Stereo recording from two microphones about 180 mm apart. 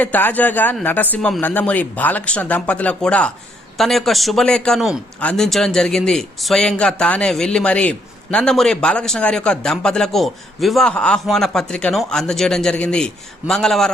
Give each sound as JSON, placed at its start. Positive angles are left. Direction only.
{"t": 0.0, "sound": "a man's voice", "side_deg": 10}